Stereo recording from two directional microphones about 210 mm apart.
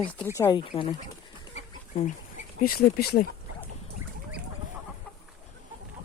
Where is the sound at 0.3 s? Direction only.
15° left (ahead or behind).